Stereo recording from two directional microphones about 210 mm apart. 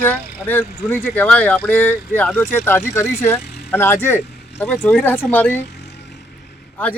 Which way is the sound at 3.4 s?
50° left (ahead or behind).